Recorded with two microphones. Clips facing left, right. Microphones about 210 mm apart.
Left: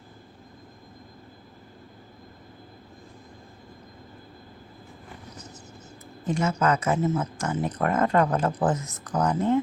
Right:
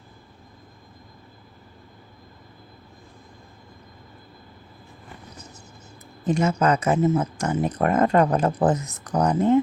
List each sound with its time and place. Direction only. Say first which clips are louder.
6.2 s speech: right 3 dB; 15° right (ahead or behind)
7.0 s speech: right 5 dB; 30° right (ahead or behind)
7.3 s speech: right 4 dB; 15° right (ahead or behind)
8.4 s speech: right 4 dB; 35° right (ahead or behind)